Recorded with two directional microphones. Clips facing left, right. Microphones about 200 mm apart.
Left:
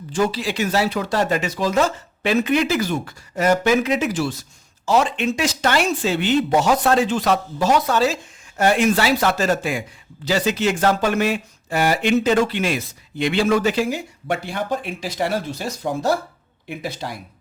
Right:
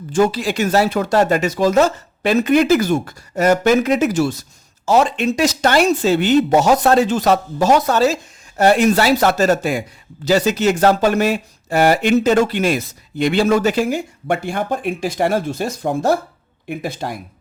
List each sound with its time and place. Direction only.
0.1 s speech: 45° right (ahead or behind)